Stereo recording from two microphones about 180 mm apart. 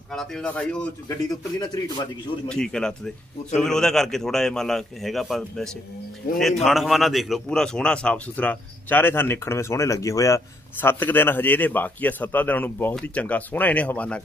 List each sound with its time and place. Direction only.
0.1 s a man's voice: 5° left (ahead or behind)
1.0 s a man's voice: 20° left (ahead or behind)
2.4 s a man's voice: 5° left (ahead or behind)